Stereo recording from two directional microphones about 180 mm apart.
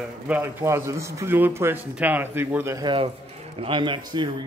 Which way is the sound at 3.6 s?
25° right (ahead or behind).